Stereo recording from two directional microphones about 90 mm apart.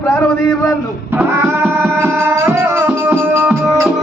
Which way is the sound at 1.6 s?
25° right (ahead or behind).